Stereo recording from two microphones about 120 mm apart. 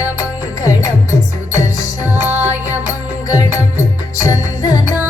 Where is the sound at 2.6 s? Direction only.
30° left (ahead or behind).